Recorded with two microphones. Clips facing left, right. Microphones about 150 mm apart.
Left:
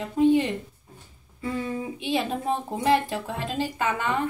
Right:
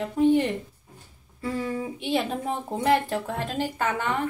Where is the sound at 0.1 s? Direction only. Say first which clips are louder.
Left 1 dB; 15° left (ahead or behind).